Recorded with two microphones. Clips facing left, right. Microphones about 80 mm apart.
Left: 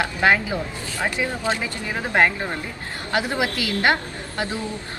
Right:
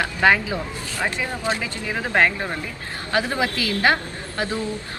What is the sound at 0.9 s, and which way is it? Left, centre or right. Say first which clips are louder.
Speech: left 1 dB; left.